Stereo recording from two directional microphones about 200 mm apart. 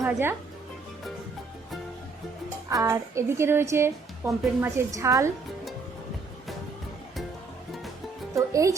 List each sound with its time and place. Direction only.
0.0 s speech: 10° right (ahead or behind)
2.6 s a woman's voice: 15° right (ahead or behind)
8.4 s a woman's voice: 15° right (ahead or behind)